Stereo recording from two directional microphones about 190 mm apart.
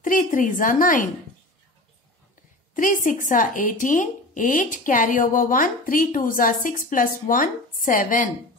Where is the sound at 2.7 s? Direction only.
45° left (ahead or behind).